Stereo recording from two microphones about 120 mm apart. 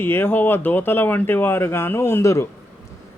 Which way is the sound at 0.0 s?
15° left (ahead or behind).